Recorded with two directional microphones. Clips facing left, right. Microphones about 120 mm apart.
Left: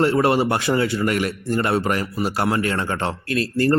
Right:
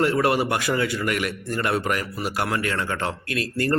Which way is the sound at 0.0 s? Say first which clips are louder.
Left 3 dB; 30° left (ahead or behind).